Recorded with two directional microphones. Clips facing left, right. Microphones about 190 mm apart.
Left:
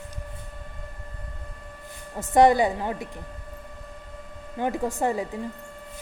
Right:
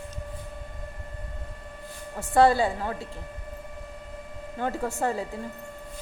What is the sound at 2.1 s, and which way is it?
Speech, 15° left (ahead or behind).